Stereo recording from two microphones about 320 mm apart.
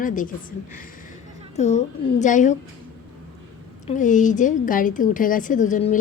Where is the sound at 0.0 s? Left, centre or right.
Left.